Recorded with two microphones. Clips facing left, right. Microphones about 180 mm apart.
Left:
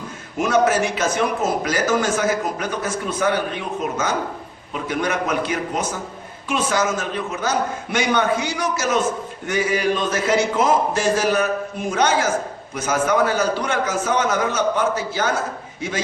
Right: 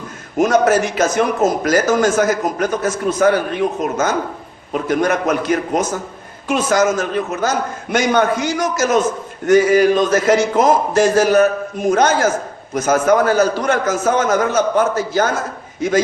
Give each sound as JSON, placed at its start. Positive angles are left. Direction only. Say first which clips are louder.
{"t": 0.3, "sound": "a man's voice", "louder": "right 4 dB", "side_deg": -40}